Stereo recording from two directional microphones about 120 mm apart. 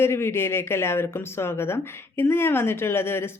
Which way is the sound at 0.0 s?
20° left (ahead or behind).